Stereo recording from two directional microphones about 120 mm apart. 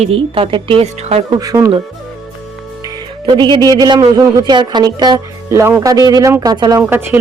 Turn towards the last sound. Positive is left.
turn(degrees=-20)  # may be behind; listen again after turning